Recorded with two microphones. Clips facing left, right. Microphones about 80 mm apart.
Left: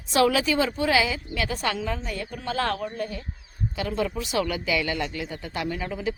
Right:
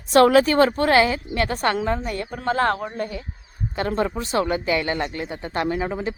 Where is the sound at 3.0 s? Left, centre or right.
Right.